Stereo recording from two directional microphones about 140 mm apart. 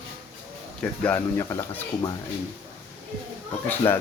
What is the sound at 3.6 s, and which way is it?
Speech, 15° left (ahead or behind).